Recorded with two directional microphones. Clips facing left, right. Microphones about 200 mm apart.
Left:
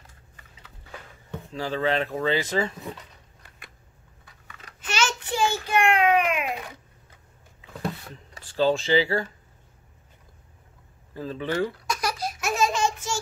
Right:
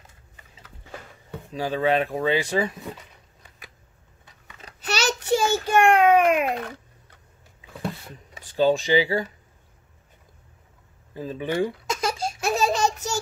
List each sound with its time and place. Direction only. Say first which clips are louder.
1.3 s speech: right 2 dB; 15° right (ahead or behind)
4.6 s child singing: even; 35° right (ahead or behind)
8.4 s speech: right 2 dB; 15° right (ahead or behind)
11.1 s speech: right 1 dB; 15° right (ahead or behind)
11.9 s baby laughter: right 2 dB; 25° right (ahead or behind)